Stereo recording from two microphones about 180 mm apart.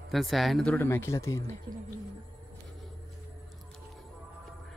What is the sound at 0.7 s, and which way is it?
Speech, 15° left (ahead or behind).